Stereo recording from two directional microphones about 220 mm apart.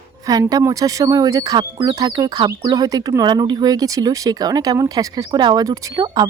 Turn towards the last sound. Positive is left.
turn(degrees=-20)  # may be behind; listen again after turning